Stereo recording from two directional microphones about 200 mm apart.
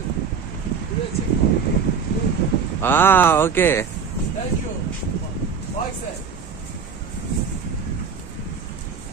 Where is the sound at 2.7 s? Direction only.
10° left (ahead or behind).